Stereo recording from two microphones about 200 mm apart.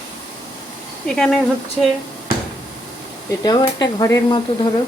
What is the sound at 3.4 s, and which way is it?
Speech, 20° left (ahead or behind).